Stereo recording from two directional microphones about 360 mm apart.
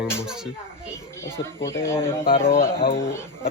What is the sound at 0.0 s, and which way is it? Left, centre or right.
Speech, centre.